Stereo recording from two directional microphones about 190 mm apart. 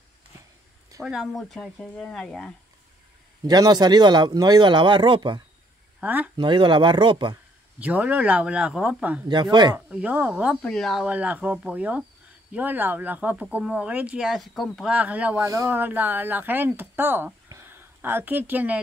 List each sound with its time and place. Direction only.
1.0 s speech: centre (ahead or behind)
3.4 s speech: 20° right (ahead or behind)
5.9 s speech: 10° right (ahead or behind)
6.3 s speech: 25° right (ahead or behind)
7.8 s speech: 5° right (ahead or behind)
9.3 s speech: 25° right (ahead or behind)
9.8 s speech: 5° right (ahead or behind)